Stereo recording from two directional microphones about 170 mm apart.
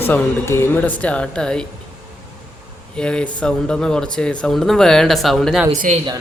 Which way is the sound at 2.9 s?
5° left (ahead or behind).